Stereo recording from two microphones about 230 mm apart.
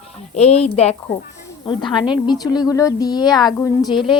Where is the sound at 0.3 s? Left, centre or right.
Left.